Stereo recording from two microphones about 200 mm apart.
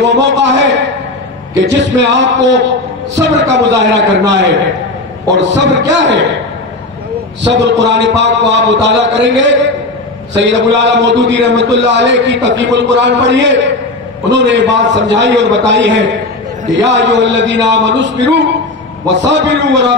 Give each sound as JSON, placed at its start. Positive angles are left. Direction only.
{"t": 0.0, "sound": "a man's voice", "side_deg": -60}
{"t": 5.6, "sound": "a man's voice", "side_deg": -65}
{"t": 7.4, "sound": "a man's voice", "side_deg": -60}